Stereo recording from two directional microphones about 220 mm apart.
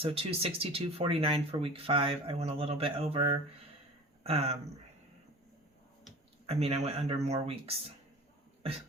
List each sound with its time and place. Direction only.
0.0 s speech: 25° right (ahead or behind)
6.4 s speech: 25° right (ahead or behind)